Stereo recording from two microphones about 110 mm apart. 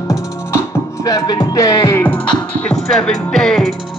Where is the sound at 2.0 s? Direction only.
10° left (ahead or behind).